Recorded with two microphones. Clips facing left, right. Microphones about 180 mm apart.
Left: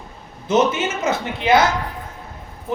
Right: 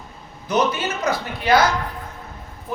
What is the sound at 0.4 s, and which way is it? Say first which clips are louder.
Speech: left 3 dB; 25° left (ahead or behind).